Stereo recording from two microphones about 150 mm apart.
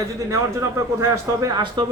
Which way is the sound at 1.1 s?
30° right (ahead or behind).